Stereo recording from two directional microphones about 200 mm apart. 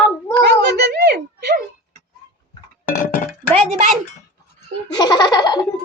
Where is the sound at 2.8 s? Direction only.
45° left (ahead or behind).